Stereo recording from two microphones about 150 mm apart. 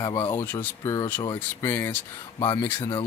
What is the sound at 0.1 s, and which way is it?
Speech, 35° left (ahead or behind).